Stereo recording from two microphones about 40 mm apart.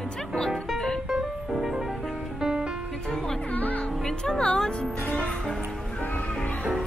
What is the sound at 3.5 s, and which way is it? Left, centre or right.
Music, left.